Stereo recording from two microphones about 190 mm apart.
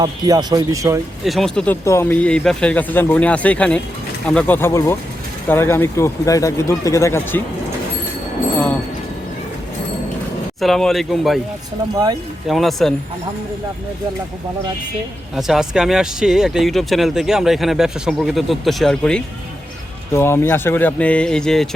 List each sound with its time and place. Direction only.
0.0 s speech: 20° right (ahead or behind)
1.2 s speech: centre (ahead or behind)
10.6 s speech: centre (ahead or behind)
12.5 s speech: centre (ahead or behind)
15.4 s speech: centre (ahead or behind)